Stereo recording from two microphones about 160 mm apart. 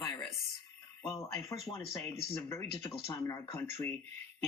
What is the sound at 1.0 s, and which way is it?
Speech, 20° left (ahead or behind).